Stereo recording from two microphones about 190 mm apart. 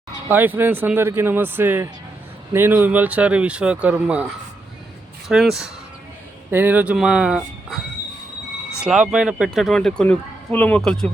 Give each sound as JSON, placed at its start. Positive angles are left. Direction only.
{"t": 0.3, "sound": "speech", "side_deg": -10}
{"t": 5.3, "sound": "speech", "side_deg": 0}
{"t": 8.8, "sound": "speech", "side_deg": -5}